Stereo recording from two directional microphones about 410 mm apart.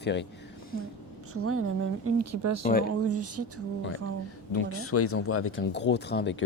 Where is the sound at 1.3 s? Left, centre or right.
Right.